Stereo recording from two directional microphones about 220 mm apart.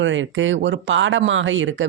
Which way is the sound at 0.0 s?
60° right (ahead or behind).